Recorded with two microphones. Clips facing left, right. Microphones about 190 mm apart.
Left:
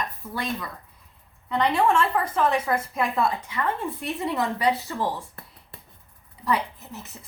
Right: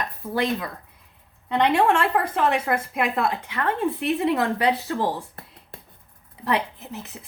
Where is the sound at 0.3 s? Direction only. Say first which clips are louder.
Right 6 dB; 70° right (ahead or behind).